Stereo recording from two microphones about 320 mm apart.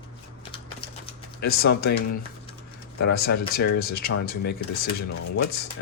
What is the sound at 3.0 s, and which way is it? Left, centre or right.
Speech, left.